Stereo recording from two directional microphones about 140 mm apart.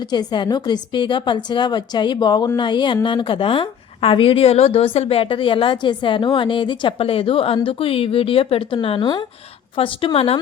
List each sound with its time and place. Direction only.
0.0 s a woman's voice: 30° left (ahead or behind)